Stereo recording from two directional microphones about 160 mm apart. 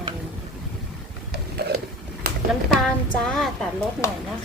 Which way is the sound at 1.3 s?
85° right.